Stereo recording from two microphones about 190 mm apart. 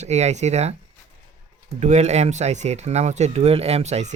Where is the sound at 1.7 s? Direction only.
35° right (ahead or behind).